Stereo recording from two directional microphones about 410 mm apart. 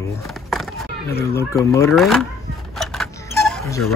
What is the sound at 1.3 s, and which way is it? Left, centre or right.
Speech, centre.